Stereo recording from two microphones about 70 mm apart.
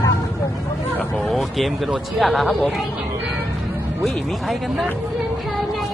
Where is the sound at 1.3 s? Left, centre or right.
Centre.